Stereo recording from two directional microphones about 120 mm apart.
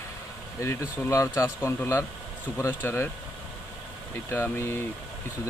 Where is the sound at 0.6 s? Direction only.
25° left (ahead or behind).